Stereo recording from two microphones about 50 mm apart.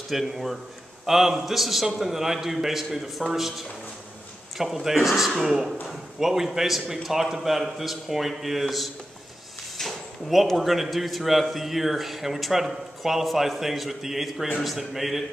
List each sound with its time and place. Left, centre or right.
0.1 s a man's voice: centre